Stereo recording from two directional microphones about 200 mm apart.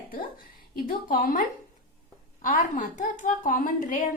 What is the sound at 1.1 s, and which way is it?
A woman's voice, 45° left (ahead or behind).